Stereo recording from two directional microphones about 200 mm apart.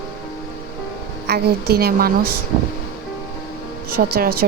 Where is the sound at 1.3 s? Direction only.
50° right (ahead or behind).